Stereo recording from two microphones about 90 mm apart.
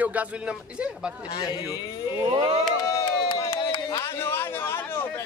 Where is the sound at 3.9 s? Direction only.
30° left (ahead or behind).